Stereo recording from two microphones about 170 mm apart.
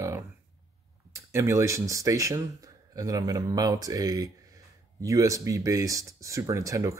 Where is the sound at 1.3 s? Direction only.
15° right (ahead or behind).